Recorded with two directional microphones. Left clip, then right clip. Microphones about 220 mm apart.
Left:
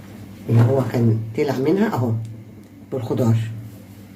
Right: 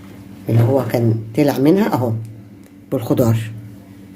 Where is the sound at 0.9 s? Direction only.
55° right (ahead or behind).